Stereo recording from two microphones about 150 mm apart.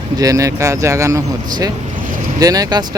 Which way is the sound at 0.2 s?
25° right (ahead or behind).